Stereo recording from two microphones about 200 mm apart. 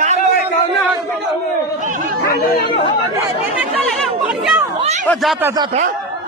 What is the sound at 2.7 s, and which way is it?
Speech, 25° left (ahead or behind).